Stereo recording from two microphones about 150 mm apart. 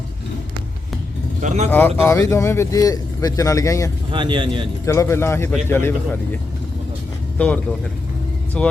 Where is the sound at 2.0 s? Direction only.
20° left (ahead or behind).